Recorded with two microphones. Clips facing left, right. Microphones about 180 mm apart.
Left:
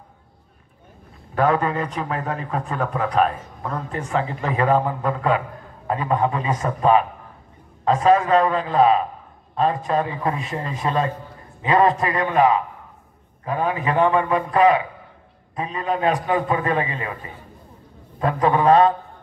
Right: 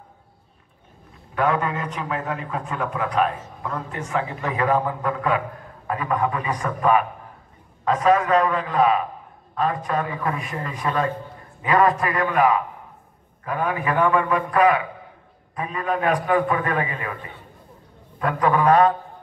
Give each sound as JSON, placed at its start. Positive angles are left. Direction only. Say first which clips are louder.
{"t": 1.3, "sound": "a man's voice", "louder": "left 3 dB", "side_deg": 35}
{"t": 18.2, "sound": "a man's voice", "louder": "left 1 dB", "side_deg": 25}